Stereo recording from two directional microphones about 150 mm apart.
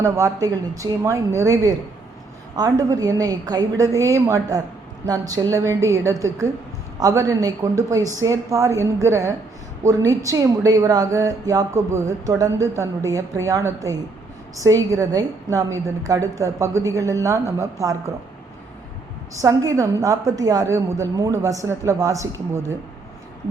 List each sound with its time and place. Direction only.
0.0 s a woman's voice: 20° right (ahead or behind)
19.3 s a woman's voice: 20° right (ahead or behind)